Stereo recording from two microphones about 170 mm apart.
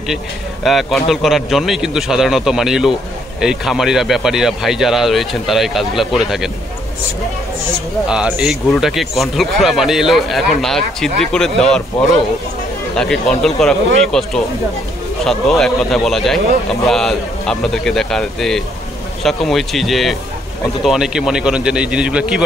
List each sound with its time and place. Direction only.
0.7 s a man's voice: centre (ahead or behind)
8.1 s a man's voice: 5° right (ahead or behind)
12.9 s a man's voice: 5° left (ahead or behind)